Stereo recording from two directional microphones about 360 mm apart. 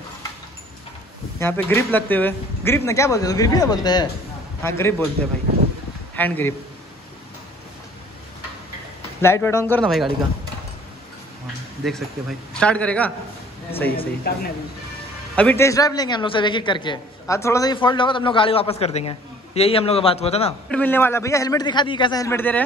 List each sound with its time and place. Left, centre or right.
1.4 s a man's voice: centre
6.1 s a man's voice: centre
9.2 s a man's voice: centre
11.8 s a man's voice: centre
14.3 s speech: left
15.3 s a man's voice: centre
20.7 s a man's voice: centre